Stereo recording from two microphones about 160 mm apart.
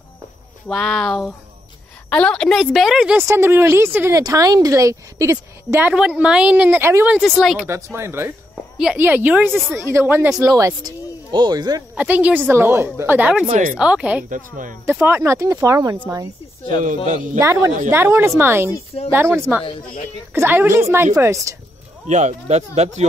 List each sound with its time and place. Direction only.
0.7 s a woman's voice: 5° left (ahead or behind); by 7.2 s 15° right (ahead or behind)
7.3 s a woman's voice: centre (ahead or behind)
7.6 s speech: 15° right (ahead or behind)
9.5 s a woman's voice: centre (ahead or behind)
9.8 s speech: 15° right (ahead or behind)
12.0 s speech: 10° right (ahead or behind)
13.5 s speech: 50° right (ahead or behind)
13.7 s speech: 5° right (ahead or behind)
14.3 s speech: 55° right (ahead or behind)
14.9 s speech: 15° right (ahead or behind)
17.1 s speech: 50° right (ahead or behind)
17.4 s speech: 15° right (ahead or behind)
20.3 s speech: 10° right (ahead or behind)
22.0 s speech: 45° right (ahead or behind)